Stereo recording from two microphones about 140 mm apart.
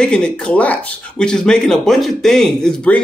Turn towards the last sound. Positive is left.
turn(degrees=5)  # may be behind; listen again after turning